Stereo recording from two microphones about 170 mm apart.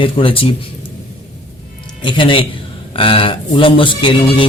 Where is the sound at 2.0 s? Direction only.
30° left (ahead or behind).